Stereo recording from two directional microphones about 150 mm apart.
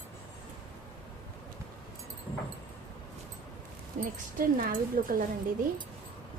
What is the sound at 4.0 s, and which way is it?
Speech, 70° right (ahead or behind).